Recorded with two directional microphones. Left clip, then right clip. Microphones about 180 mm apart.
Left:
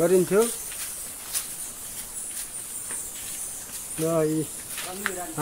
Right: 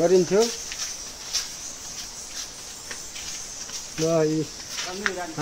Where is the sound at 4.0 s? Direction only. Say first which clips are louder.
Right 2 dB; 15° left (ahead or behind).